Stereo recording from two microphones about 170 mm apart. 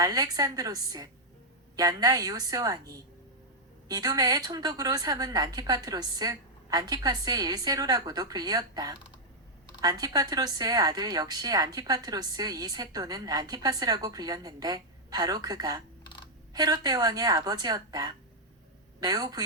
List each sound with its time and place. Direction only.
0.0 s a woman's voice: 20° right (ahead or behind)
16.0 s a sound: 30° left (ahead or behind)
16.6 s a woman's voice: 20° right (ahead or behind)